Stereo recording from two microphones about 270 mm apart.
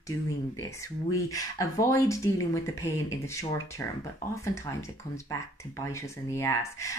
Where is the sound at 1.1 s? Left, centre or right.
Centre.